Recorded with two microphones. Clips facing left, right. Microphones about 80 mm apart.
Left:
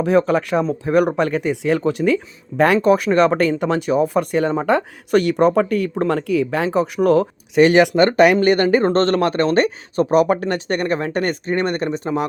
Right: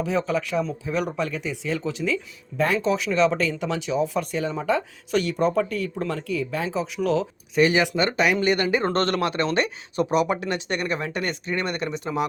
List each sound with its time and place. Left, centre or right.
0.0 s speech: left